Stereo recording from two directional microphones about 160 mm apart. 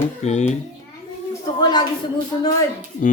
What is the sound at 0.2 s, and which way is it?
Speech, 45° left (ahead or behind).